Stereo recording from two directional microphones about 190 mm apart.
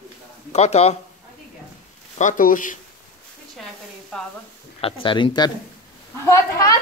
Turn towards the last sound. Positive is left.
turn(degrees=15)  # may be behind; listen again after turning